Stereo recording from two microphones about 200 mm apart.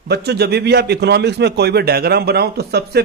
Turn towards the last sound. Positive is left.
turn(degrees=-55)  # may be behind; listen again after turning